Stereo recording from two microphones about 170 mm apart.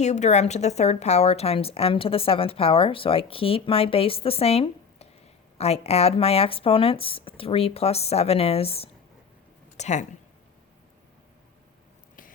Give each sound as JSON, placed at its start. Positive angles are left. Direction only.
{"t": 0.0, "sound": "a woman's voice", "side_deg": 40}